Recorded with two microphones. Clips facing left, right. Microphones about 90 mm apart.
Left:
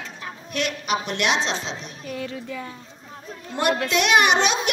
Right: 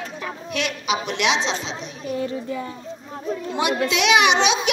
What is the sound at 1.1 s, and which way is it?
Speech, 50° left (ahead or behind).